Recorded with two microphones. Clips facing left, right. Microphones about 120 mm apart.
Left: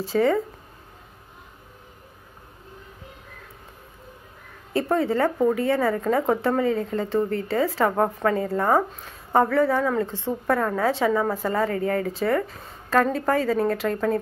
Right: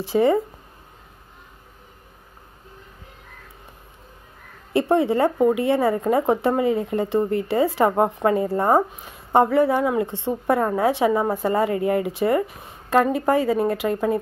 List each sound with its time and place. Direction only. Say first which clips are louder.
0.1 s a woman's voice: right 2 dB; 20° right (ahead or behind)
4.7 s a woman's voice: right 3 dB; 20° right (ahead or behind)
8.5 s a woman's voice: right 2 dB; 25° right (ahead or behind)
8.9 s a woman's voice: right 3 dB; 15° right (ahead or behind)